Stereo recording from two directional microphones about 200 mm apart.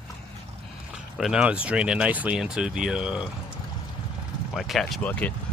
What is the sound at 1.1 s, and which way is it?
Speech, 5° right (ahead or behind).